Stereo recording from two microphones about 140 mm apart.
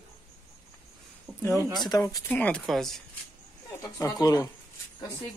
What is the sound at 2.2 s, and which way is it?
Speech, 10° left (ahead or behind).